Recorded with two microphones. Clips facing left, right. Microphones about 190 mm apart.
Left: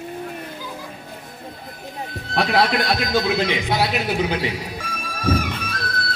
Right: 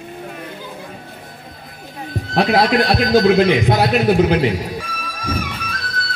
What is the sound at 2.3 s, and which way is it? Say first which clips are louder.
A man's voice: right 4 dB; 40° right (ahead or behind).